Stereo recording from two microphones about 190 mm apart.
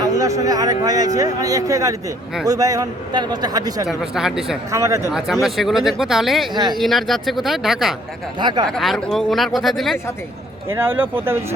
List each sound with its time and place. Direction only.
0.0 s a man's voice: 15° right (ahead or behind)
3.8 s speech: 5° right (ahead or behind)
4.7 s speech: 15° right (ahead or behind)
5.1 s speech: centre (ahead or behind)
6.5 s a man's voice: 25° right (ahead or behind)
6.7 s speech: centre (ahead or behind)
8.4 s a man's voice: 25° right (ahead or behind)
8.6 s speech: centre (ahead or behind)
10.7 s speech: 10° right (ahead or behind)